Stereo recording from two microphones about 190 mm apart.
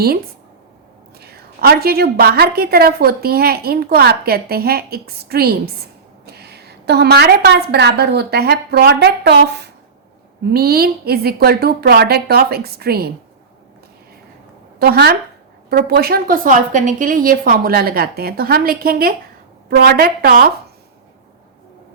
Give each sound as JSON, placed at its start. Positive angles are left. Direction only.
{"t": 1.2, "sound": "a woman's voice", "side_deg": -55}
{"t": 14.8, "sound": "a woman's voice", "side_deg": -60}